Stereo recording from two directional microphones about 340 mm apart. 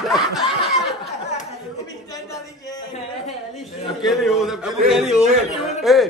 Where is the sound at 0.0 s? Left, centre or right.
Centre.